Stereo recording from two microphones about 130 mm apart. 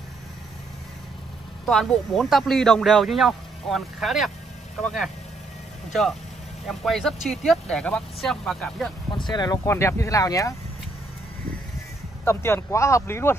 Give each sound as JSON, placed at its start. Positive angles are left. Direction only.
{"t": 1.7, "sound": "speech", "side_deg": 0}
{"t": 6.7, "sound": "speech", "side_deg": 0}
{"t": 9.1, "sound": "speech", "side_deg": 35}
{"t": 9.7, "sound": "speech", "side_deg": 20}
{"t": 12.3, "sound": "speech", "side_deg": 20}